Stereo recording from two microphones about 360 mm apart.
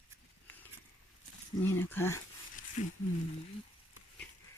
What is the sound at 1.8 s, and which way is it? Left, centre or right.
Speech, centre.